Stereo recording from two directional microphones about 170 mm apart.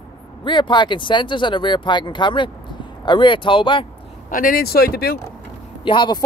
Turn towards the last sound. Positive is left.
turn(degrees=25)  # may be behind; listen again after turning